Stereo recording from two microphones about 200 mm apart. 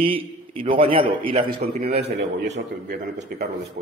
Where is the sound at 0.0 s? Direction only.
25° right (ahead or behind).